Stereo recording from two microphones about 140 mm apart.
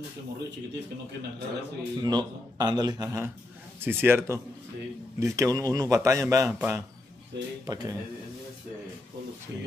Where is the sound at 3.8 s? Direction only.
15° right (ahead or behind).